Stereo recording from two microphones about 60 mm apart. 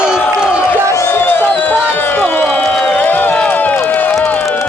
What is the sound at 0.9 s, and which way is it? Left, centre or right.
Music, left.